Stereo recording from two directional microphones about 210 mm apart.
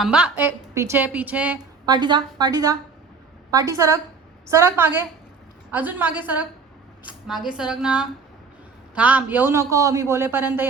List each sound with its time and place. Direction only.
0.0 s a man's voice: 5° right (ahead or behind)
1.9 s a woman's voice: 20° right (ahead or behind)